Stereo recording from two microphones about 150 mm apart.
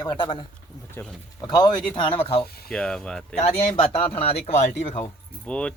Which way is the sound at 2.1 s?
40° left (ahead or behind).